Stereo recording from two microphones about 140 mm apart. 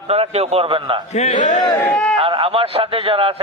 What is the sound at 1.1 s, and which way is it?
Speech, 60° left (ahead or behind).